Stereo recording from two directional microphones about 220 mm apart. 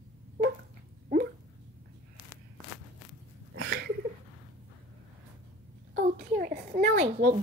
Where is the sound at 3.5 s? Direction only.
45° right (ahead or behind).